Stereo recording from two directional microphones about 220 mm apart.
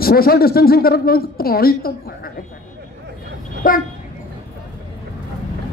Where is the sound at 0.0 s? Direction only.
45° left (ahead or behind).